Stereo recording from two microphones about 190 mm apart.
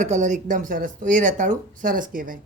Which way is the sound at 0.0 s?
40° right (ahead or behind).